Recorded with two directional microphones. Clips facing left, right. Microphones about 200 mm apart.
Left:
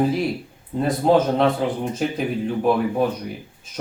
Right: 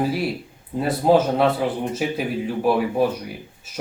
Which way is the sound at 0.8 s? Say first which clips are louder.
Even; 5° right (ahead or behind).